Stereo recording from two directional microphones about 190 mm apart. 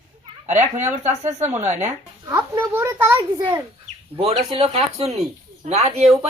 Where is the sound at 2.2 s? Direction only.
15° right (ahead or behind).